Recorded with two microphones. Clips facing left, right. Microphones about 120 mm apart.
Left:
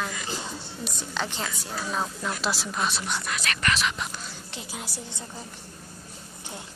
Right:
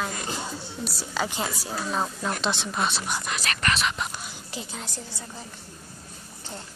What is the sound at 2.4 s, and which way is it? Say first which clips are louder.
Speech: right 1 dB; 5° left (ahead or behind).